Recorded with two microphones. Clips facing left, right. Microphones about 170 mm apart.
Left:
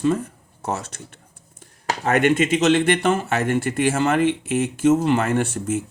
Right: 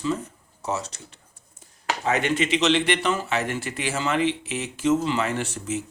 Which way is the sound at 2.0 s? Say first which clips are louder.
Left 6 dB; 55° left (ahead or behind).